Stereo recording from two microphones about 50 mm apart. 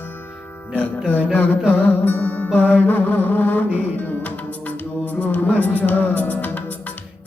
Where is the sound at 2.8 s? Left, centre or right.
Left.